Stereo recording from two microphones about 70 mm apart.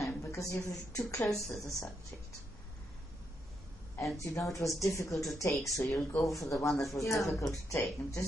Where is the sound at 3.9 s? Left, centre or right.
Left.